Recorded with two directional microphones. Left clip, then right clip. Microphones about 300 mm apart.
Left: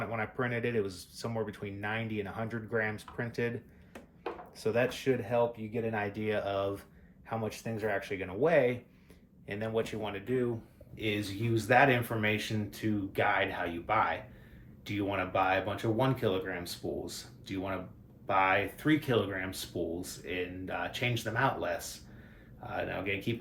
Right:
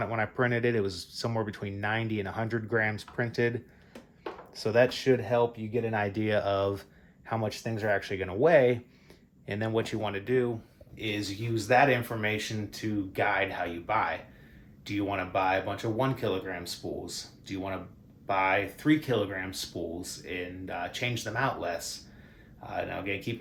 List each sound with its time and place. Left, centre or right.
0.0 s speech: right
4.5 s speech: right
10.9 s speech: centre